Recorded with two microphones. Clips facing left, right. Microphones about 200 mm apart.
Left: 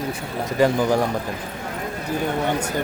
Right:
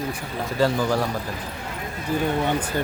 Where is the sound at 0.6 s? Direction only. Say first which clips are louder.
Left 3 dB; 15° left (ahead or behind).